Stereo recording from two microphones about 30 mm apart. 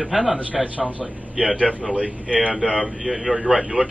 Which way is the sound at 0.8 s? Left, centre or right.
Right.